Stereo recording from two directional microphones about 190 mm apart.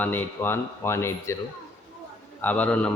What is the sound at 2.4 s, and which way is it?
Speech, 10° left (ahead or behind).